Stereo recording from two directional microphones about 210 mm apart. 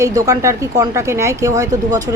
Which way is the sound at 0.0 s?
15° right (ahead or behind).